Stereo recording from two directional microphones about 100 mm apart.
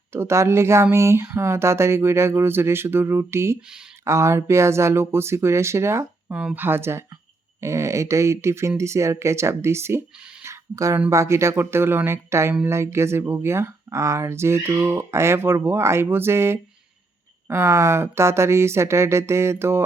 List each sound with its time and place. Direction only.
0.1 s speech: 25° right (ahead or behind)
6.3 s speech: 15° right (ahead or behind)
10.4 s a sound: 30° right (ahead or behind)
11.1 s speech: 30° right (ahead or behind)